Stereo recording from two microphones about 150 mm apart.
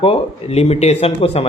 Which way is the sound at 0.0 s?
40° left (ahead or behind).